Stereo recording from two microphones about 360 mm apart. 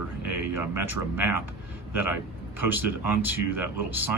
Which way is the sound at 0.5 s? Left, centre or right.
Centre.